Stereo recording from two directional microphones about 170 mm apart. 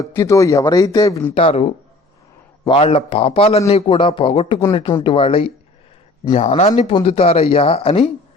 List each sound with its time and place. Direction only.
0.0 s a man's voice: 20° left (ahead or behind)
1.4 s speech: 35° left (ahead or behind)
2.6 s speech: 35° left (ahead or behind)